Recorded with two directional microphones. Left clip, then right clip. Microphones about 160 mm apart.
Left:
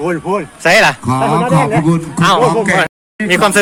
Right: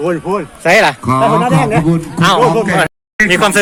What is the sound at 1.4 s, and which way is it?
Speech, 80° right.